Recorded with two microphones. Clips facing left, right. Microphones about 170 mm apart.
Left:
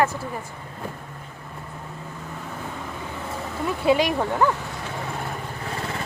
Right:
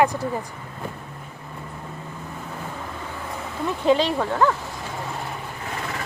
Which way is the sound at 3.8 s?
10° left (ahead or behind).